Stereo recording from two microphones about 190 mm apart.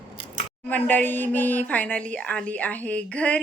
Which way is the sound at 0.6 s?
10° left (ahead or behind).